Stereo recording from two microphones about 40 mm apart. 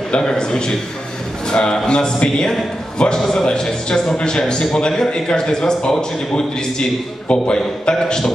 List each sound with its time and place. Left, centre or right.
0.1 s a man's voice: centre